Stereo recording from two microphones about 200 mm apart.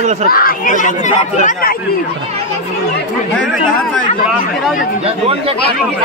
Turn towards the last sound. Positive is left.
turn(degrees=-30)  # may be behind; listen again after turning